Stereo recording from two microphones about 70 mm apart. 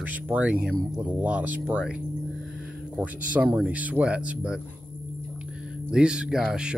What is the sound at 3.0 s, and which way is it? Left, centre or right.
Speech, centre.